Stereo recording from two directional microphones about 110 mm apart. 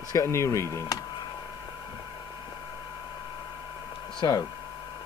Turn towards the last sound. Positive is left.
turn(degrees=35)  # may be behind; listen again after turning